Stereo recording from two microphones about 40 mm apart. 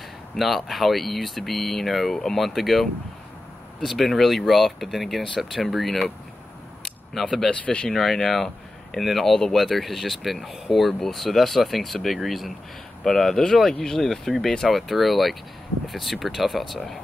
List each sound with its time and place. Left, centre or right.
0.4 s speech: centre
7.2 s speech: centre
7.5 s speech: left
7.9 s speech: centre